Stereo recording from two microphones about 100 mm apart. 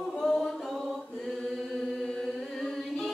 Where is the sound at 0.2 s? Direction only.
5° left (ahead or behind).